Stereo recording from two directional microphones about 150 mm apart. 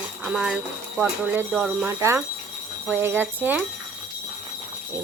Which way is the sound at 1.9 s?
20° right (ahead or behind).